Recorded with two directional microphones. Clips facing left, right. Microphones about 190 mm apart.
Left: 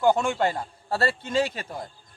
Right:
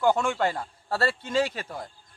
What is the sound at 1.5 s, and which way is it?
Speech, 15° left (ahead or behind).